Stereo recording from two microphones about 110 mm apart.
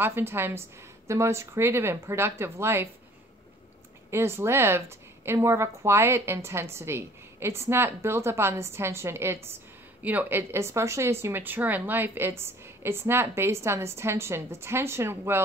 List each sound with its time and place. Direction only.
0.0 s a woman's voice: 20° right (ahead or behind)
4.1 s a woman's voice: 20° right (ahead or behind)